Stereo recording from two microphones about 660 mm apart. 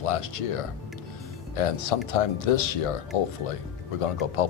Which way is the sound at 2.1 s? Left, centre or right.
Left.